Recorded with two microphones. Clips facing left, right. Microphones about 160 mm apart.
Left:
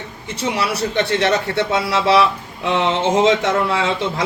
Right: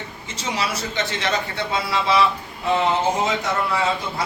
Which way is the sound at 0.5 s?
65° left (ahead or behind).